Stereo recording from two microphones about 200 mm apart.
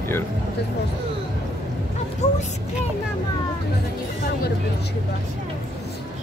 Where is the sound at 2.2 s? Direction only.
35° left (ahead or behind).